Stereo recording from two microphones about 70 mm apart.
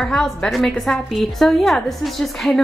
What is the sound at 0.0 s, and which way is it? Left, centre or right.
A woman's voice, centre.